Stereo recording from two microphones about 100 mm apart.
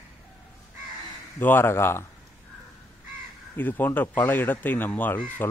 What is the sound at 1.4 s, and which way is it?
Speech, 20° left (ahead or behind).